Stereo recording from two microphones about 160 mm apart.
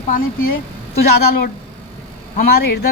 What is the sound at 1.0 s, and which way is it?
Speech, 75° left (ahead or behind).